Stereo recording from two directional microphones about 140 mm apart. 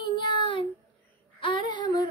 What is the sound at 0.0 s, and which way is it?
Child singing, 35° left (ahead or behind).